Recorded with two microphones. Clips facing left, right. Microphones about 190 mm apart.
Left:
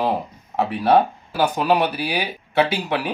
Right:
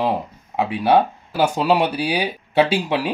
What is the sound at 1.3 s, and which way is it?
Speech, 25° right (ahead or behind).